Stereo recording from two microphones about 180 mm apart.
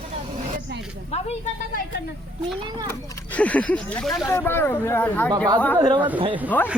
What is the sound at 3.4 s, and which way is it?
Speech, 5° left (ahead or behind).